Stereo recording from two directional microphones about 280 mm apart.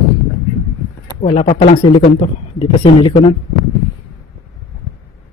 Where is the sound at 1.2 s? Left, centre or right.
Centre.